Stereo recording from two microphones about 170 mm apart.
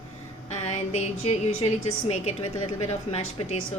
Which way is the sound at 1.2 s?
35° left (ahead or behind).